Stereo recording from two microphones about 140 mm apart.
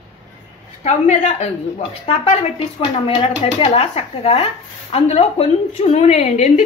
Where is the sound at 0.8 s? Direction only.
55° left (ahead or behind).